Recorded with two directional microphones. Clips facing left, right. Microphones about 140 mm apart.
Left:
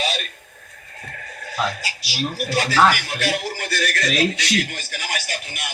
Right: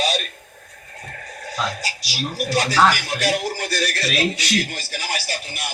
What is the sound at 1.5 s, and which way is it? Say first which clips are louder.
Speech: left 1 dB; 40° right (ahead or behind).